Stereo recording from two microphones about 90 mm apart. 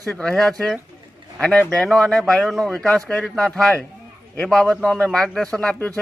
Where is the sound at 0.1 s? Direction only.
10° left (ahead or behind).